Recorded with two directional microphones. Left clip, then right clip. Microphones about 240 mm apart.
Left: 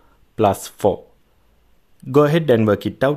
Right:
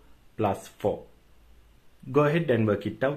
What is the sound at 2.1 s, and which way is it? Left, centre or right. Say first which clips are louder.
Speech: left 9 dB; left.